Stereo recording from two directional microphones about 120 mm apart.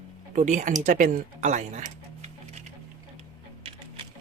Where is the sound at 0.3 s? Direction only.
90° right.